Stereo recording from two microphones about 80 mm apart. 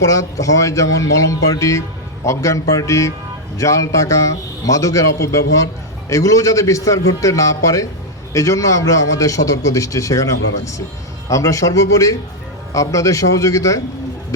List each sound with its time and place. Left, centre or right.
0.0 s a man's voice: left
11.3 s a man's voice: left